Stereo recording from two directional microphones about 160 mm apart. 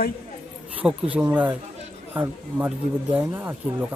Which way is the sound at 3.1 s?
15° right (ahead or behind).